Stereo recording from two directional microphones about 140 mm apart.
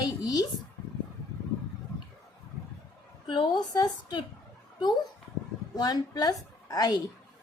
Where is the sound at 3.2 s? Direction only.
30° left (ahead or behind).